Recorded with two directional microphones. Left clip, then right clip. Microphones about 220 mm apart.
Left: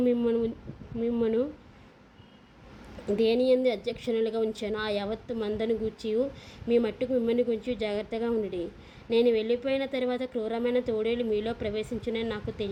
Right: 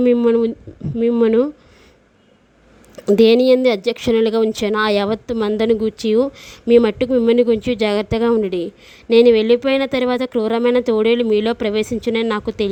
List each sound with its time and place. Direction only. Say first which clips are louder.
0.0 s a woman's voice: right 12 dB; 45° right (ahead or behind)
3.1 s a woman's voice: right 12 dB; 55° right (ahead or behind)